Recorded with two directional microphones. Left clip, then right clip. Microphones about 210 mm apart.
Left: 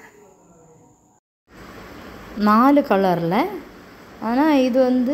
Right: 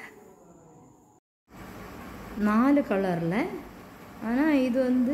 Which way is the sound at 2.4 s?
20° left (ahead or behind).